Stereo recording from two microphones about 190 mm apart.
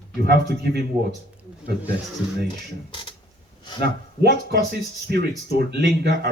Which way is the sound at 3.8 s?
55° right (ahead or behind).